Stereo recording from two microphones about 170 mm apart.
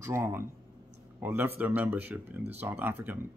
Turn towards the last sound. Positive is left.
turn(degrees=-10)  # may be behind; listen again after turning